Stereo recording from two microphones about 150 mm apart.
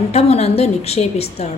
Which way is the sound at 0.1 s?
45° left (ahead or behind).